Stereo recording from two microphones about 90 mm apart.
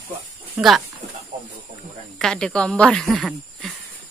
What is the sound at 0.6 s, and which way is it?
Speech, 15° right (ahead or behind).